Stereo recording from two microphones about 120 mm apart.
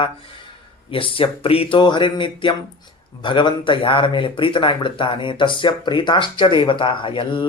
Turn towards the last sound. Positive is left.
turn(degrees=45)  # may be behind; listen again after turning